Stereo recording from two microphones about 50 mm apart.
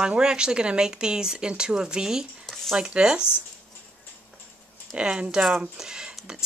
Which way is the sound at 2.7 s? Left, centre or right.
Centre.